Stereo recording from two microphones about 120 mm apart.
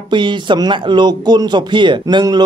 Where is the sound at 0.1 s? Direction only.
40° right (ahead or behind).